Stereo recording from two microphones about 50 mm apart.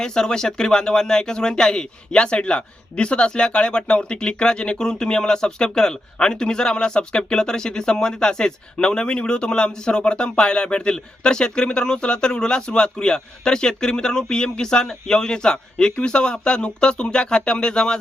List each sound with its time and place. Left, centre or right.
0.0 s speech: centre